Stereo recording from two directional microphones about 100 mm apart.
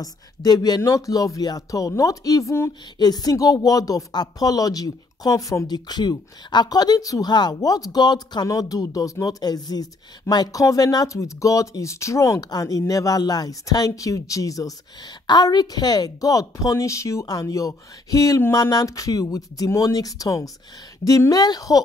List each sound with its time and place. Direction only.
0.0 s speech: 40° left (ahead or behind)
3.0 s speech: 40° left (ahead or behind)